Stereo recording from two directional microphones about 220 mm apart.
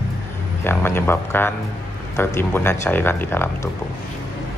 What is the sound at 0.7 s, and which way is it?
Speech, 10° left (ahead or behind).